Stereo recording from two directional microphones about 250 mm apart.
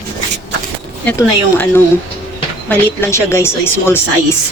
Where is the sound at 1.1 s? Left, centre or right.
Centre.